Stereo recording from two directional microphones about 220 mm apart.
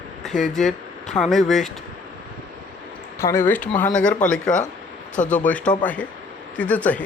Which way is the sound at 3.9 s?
35° left (ahead or behind).